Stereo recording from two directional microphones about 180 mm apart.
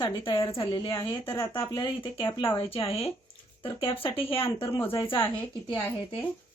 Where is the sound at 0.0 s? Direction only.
30° left (ahead or behind).